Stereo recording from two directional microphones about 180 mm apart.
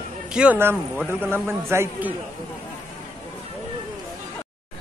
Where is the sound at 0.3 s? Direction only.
5° right (ahead or behind).